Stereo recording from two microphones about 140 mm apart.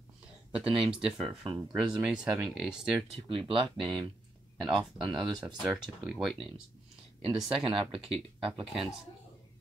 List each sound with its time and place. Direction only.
0.6 s speech: 40° right (ahead or behind)
1.9 s speech: 5° right (ahead or behind)
3.3 s speech: 40° right (ahead or behind)
5.4 s speech: 5° right (ahead or behind)
7.2 s speech: 40° right (ahead or behind)